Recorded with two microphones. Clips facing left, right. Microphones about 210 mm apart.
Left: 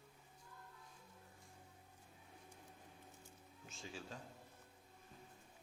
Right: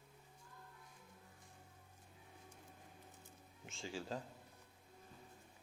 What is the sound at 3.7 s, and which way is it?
Speech, 90° right.